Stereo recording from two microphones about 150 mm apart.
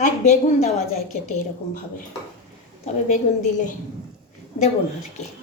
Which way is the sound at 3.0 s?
60° left (ahead or behind).